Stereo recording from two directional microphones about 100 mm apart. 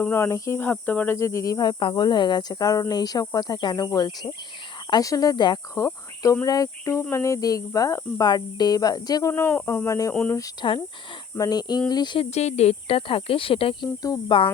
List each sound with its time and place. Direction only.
0.1 s cricket: 30° left (ahead or behind)
0.6 s cricket: 15° left (ahead or behind); by 1.7 s 40° left (ahead or behind)
1.8 s speech: 55° left (ahead or behind)
5.7 s insect: 30° left (ahead or behind)
6.4 s speech: 35° left (ahead or behind)
8.3 s speech: 45° left (ahead or behind)
9.3 s cricket: 20° left (ahead or behind)
10.3 s speech: 35° left (ahead or behind)
12.2 s speech: 90° left; by 13.7 s 65° left (ahead or behind)
13.8 s speech: 45° left (ahead or behind)